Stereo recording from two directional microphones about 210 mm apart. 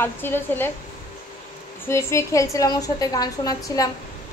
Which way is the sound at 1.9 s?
15° left (ahead or behind).